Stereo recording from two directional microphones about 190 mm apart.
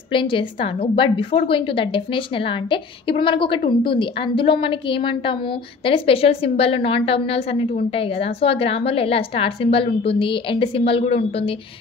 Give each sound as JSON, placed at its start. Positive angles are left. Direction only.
{"t": 0.1, "sound": "a woman's voice", "side_deg": 25}